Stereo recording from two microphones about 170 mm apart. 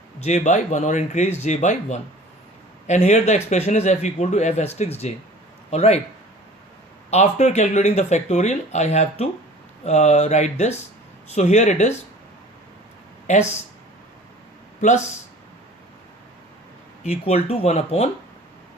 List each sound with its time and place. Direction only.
0.2 s speech: 45° left (ahead or behind)
7.1 s speech: 40° left (ahead or behind)
14.8 s speech: 45° left (ahead or behind)
17.0 s speech: 40° left (ahead or behind)